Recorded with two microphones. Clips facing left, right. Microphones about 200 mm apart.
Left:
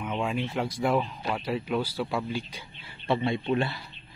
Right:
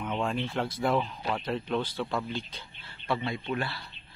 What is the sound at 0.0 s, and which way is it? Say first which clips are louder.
Speech: left 1 dB; 10° left (ahead or behind).